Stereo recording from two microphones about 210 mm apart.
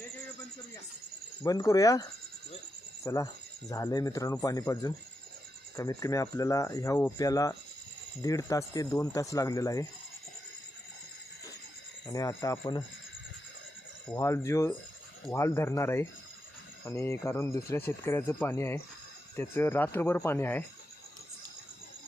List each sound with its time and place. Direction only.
1.5 s speech: 15° left (ahead or behind)
3.0 s cricket: 15° left (ahead or behind)
3.7 s speech: 15° left (ahead or behind)
12.0 s speech: 15° left (ahead or behind)
14.1 s speech: 15° left (ahead or behind)